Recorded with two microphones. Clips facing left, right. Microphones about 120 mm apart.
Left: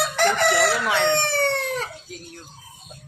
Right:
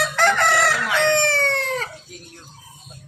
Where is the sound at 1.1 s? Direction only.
90° right.